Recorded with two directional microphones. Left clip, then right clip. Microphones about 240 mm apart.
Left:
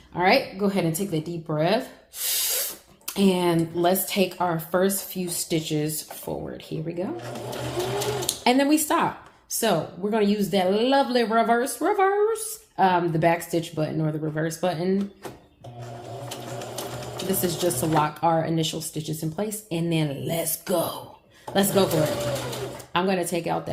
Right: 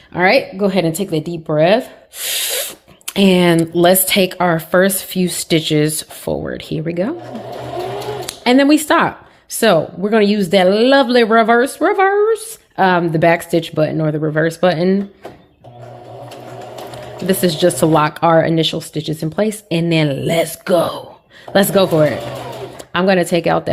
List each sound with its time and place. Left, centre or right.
0.1 s speech: right
7.4 s sewing machine: centre
8.3 s speech: right
17.2 s speech: right